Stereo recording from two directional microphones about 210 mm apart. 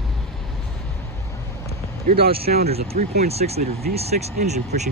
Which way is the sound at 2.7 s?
30° right (ahead or behind).